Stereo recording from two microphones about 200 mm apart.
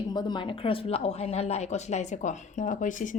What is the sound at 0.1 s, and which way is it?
A woman's voice, 20° left (ahead or behind).